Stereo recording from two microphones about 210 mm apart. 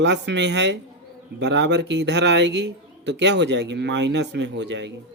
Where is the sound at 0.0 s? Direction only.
55° right (ahead or behind).